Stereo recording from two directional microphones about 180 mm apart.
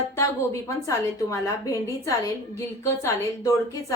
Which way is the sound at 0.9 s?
15° left (ahead or behind).